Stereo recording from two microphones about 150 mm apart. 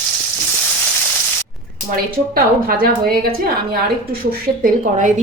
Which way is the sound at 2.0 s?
75° right (ahead or behind).